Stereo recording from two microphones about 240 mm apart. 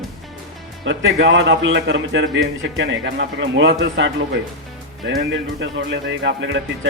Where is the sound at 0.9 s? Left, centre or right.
Right.